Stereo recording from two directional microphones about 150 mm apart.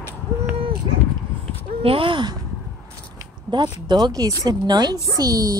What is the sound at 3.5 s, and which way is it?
Speech, 30° right (ahead or behind).